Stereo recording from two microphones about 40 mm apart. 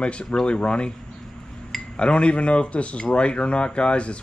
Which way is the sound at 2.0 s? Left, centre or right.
Left.